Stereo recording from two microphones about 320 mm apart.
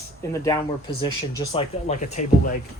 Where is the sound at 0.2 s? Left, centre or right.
Centre.